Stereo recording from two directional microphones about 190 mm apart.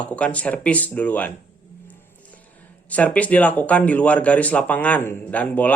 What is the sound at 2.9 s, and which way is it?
Speech, 10° left (ahead or behind).